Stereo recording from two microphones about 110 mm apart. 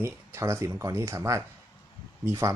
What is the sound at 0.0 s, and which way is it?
Speech, 25° right (ahead or behind).